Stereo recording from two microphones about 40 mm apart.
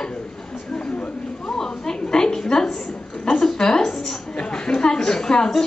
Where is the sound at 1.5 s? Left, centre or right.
Centre.